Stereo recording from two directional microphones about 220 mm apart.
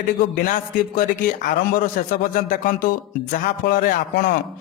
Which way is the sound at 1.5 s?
40° left (ahead or behind).